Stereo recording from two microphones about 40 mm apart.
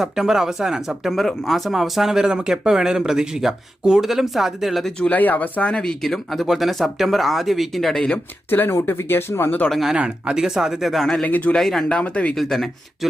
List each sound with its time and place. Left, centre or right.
0.0 s speech: centre
1.7 s speech: centre
5.1 s speech: left
5.8 s speech: centre
8.4 s speech: left
9.9 s speech: right
10.3 s speech: centre
11.2 s speech: left
11.5 s speech: centre
11.9 s speech: left
12.4 s speech: centre